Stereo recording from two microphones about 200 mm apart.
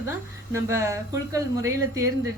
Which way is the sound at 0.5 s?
15° right (ahead or behind).